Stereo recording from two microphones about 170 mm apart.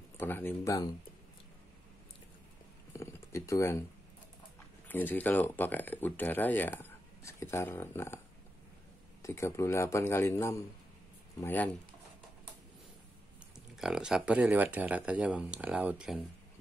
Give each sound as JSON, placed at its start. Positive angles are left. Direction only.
{"t": 0.2, "sound": "speech", "side_deg": 10}
{"t": 2.9, "sound": "a sound", "side_deg": 15}
{"t": 4.8, "sound": "speech", "side_deg": 10}
{"t": 9.2, "sound": "speech", "side_deg": 15}
{"t": 13.7, "sound": "speech", "side_deg": -5}